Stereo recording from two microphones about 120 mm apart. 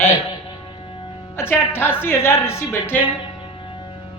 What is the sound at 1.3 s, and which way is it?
A woman's voice, 20° left (ahead or behind).